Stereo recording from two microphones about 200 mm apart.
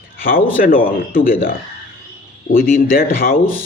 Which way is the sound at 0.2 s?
45° left (ahead or behind).